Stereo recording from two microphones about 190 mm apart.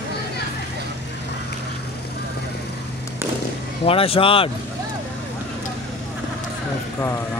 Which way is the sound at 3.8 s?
30° left (ahead or behind).